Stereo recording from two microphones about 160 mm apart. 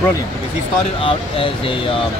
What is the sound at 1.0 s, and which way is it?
Speech, 35° left (ahead or behind).